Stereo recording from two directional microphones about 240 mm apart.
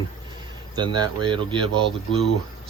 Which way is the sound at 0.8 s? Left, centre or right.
Centre.